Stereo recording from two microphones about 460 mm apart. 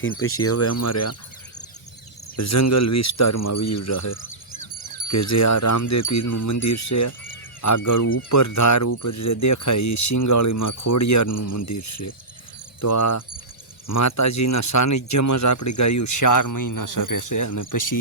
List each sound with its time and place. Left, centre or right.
0.0 s speech: left
2.3 s speech: left